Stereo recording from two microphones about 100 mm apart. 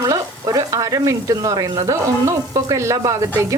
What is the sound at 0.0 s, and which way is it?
Speech, 35° right (ahead or behind).